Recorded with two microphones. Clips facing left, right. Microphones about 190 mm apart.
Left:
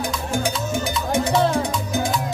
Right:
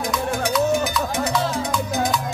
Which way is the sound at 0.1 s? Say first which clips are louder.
Right 2 dB; 30° left (ahead or behind).